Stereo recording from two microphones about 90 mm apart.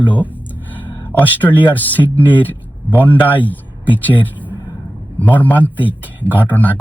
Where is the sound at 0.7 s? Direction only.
20° left (ahead or behind).